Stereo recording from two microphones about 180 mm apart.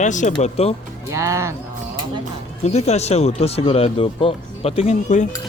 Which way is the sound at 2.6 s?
35° left (ahead or behind).